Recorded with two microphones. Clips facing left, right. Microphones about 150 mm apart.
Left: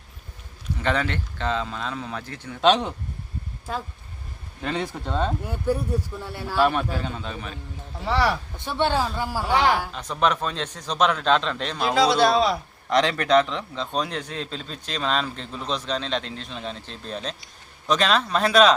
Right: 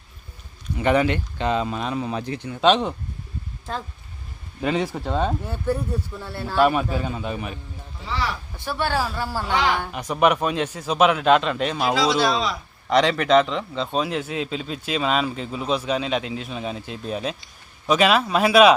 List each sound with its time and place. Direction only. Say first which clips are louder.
0.8 s a man's voice: right 6 dB; 15° right (ahead or behind)
2.5 s speech: right 1 dB; centre (ahead or behind)
4.6 s a man's voice: right 5 dB; 5° right (ahead or behind)
5.5 s speech: even; 10° left (ahead or behind)
6.6 s a man's voice: right 3 dB; 10° right (ahead or behind)
8.0 s speech: left 5 dB; 65° left (ahead or behind)
8.5 s speech: left 1 dB; 20° left (ahead or behind)
9.9 s a man's voice: right 4 dB; 10° right (ahead or behind)
11.9 s a man's voice: left 5 dB; 55° left (ahead or behind)
12.9 s a man's voice: right 2 dB; centre (ahead or behind)